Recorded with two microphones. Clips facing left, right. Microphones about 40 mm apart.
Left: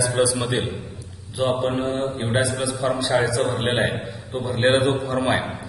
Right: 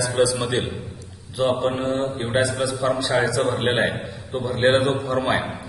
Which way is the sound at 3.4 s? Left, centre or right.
Right.